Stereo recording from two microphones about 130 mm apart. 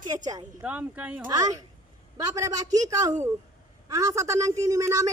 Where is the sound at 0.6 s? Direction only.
10° right (ahead or behind).